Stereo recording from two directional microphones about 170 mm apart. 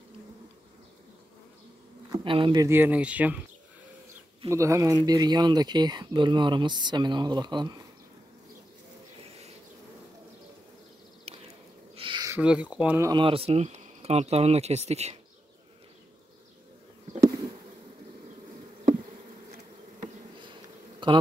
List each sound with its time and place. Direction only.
2.1 s speech: 30° right (ahead or behind)
2.7 s speech: 10° right (ahead or behind)
4.5 s speech: 15° right (ahead or behind)
11.2 s a sound: 35° right (ahead or behind)
12.3 s speech: 5° right (ahead or behind)
13.1 s speech: 30° right (ahead or behind)
17.2 s bee: 20° right (ahead or behind)
21.0 s speech: 30° right (ahead or behind)